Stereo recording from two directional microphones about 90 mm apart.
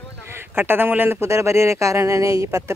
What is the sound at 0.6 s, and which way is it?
Speech, 25° right (ahead or behind).